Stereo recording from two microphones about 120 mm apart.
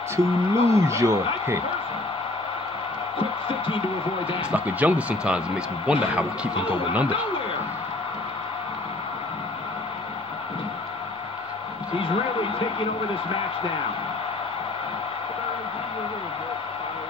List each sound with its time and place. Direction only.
0.1 s a man's voice: 25° right (ahead or behind)
3.4 s speech: 45° left (ahead or behind)
4.4 s speech: 10° right (ahead or behind)
12.0 s speech: 50° left (ahead or behind)